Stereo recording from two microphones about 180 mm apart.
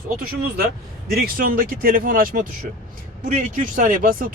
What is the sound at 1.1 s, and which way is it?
Speech, 55° right (ahead or behind).